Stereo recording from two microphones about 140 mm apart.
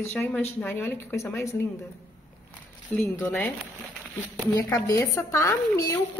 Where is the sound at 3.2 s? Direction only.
15° left (ahead or behind).